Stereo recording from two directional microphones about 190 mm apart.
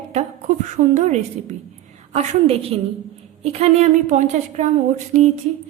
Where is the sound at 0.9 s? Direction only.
40° right (ahead or behind).